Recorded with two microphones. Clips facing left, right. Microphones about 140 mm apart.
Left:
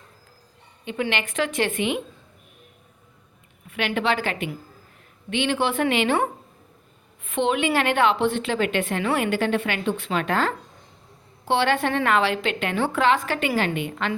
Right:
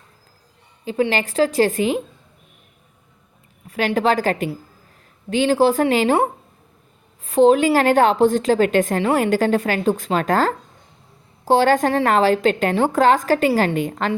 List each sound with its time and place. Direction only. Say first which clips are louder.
0.9 s a woman's voice: right 6 dB; 35° right (ahead or behind)
3.7 s a woman's voice: right 5 dB; 40° right (ahead or behind)